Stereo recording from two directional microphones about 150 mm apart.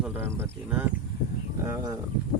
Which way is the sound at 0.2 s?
15° right (ahead or behind).